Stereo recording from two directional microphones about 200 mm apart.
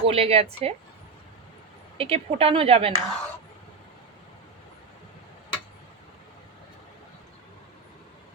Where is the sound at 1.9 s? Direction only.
30° right (ahead or behind).